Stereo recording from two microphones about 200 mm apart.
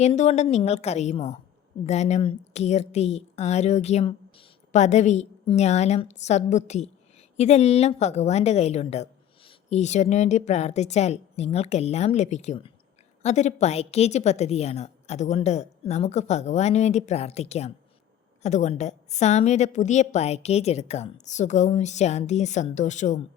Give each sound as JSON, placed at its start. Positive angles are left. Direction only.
{"t": 0.0, "sound": "a woman's voice", "side_deg": 35}